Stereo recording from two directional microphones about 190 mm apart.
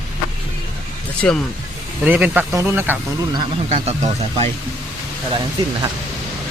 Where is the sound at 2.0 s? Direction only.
10° right (ahead or behind).